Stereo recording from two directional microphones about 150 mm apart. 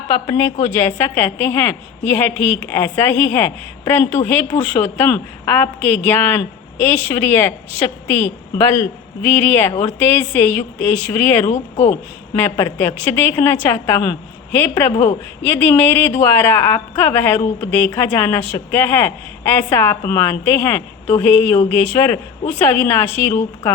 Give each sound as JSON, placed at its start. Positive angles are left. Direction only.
{"t": 0.3, "sound": "speech", "side_deg": 15}
{"t": 2.3, "sound": "a woman's voice", "side_deg": -40}
{"t": 2.6, "sound": "speech", "side_deg": 15}
{"t": 11.4, "sound": "speech", "side_deg": 50}
{"t": 11.9, "sound": "speech", "side_deg": 15}